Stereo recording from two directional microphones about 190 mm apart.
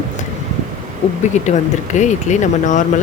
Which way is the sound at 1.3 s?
40° left (ahead or behind).